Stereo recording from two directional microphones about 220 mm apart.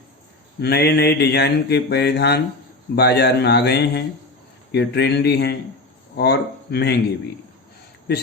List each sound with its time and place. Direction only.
0.6 s mantra: 45° left (ahead or behind)